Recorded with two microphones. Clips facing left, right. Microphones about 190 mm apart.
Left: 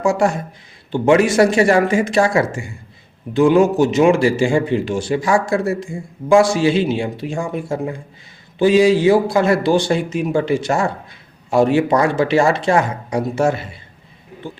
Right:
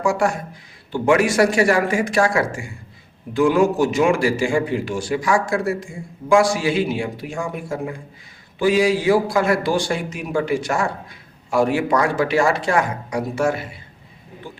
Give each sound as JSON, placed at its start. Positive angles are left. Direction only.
{"t": 0.0, "sound": "a man's voice", "side_deg": 25}